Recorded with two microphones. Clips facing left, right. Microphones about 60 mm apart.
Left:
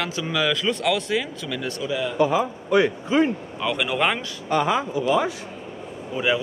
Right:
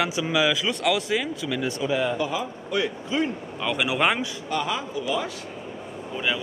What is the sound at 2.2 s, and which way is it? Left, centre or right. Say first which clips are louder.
Speech: left 7 dB; left.